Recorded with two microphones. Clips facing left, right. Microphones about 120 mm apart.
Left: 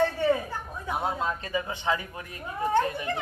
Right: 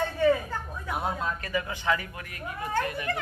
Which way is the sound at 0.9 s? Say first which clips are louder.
Left 2 dB; 20° left (ahead or behind).